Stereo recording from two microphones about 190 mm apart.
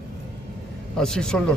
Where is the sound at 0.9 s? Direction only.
5° left (ahead or behind).